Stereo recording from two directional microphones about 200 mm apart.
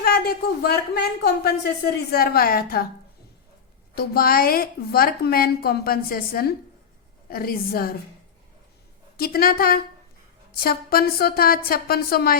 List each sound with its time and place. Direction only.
0.0 s a woman's voice: 50° left (ahead or behind)
3.9 s a woman's voice: 50° left (ahead or behind)
9.1 s a woman's voice: 50° left (ahead or behind)